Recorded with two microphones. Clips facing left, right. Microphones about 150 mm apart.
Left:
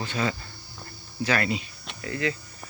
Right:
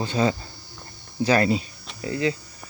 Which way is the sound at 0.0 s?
30° right (ahead or behind).